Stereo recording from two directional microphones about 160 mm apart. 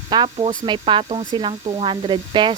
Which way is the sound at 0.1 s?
30° right (ahead or behind).